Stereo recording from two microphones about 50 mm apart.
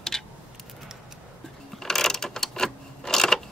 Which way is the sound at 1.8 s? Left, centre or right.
Centre.